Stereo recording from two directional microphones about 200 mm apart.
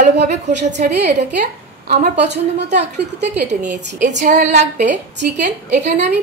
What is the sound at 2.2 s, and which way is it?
Speech, 60° right (ahead or behind).